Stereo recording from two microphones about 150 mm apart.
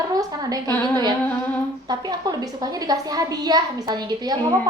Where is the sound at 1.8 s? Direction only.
25° right (ahead or behind).